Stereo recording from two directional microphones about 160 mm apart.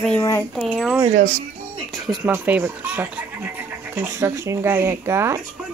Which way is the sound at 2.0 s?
10° right (ahead or behind).